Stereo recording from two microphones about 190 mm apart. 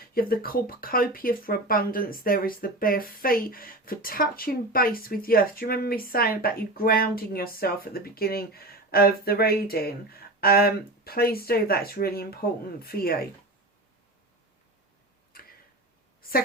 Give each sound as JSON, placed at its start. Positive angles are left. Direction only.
{"t": 0.0, "sound": "speech", "side_deg": 50}
{"t": 15.3, "sound": "tick-tock", "side_deg": 50}